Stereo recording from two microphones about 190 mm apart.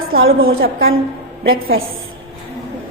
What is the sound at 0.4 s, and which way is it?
Speech, 50° right (ahead or behind).